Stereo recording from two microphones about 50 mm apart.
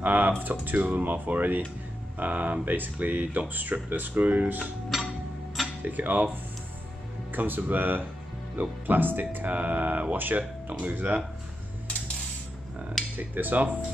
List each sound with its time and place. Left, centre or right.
0.0 s speech: right
4.9 s music: centre
5.8 s speech: right
7.3 s speech: right
13.0 s dishes: centre
13.3 s speech: right